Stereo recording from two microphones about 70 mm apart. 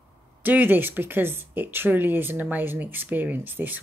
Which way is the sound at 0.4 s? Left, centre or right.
Right.